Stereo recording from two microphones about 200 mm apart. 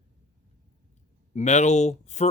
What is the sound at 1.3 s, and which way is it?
Speech, 35° left (ahead or behind).